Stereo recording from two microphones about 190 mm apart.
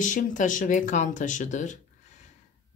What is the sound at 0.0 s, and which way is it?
Speech, 40° left (ahead or behind).